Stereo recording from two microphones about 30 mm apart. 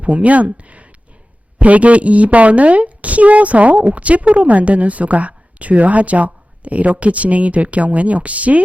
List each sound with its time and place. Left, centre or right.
0.0 s a woman's voice: right